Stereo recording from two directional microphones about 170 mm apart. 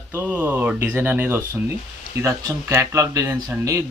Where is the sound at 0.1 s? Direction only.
10° right (ahead or behind).